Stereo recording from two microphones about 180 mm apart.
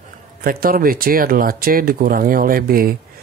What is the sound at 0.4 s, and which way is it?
Speech, 55° right (ahead or behind).